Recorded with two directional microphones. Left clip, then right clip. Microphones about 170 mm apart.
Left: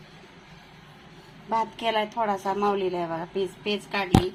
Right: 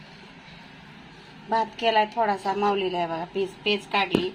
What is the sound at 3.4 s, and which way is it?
Speech, 40° left (ahead or behind).